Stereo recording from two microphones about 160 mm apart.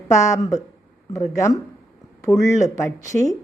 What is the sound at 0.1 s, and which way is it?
Speech, 20° left (ahead or behind).